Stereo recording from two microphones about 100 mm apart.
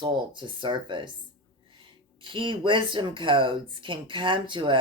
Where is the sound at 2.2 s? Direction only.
60° right (ahead or behind).